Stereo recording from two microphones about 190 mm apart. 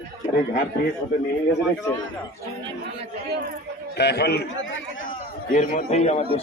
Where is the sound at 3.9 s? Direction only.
60° left (ahead or behind).